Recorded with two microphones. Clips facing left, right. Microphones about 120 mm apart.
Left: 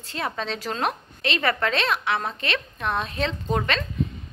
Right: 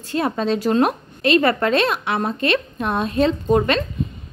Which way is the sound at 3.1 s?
40° right (ahead or behind).